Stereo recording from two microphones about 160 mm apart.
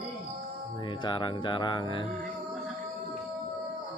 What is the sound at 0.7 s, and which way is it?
Speech, 30° left (ahead or behind).